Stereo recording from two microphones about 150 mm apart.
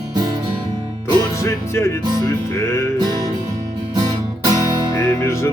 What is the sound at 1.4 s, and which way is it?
Music, 20° left (ahead or behind).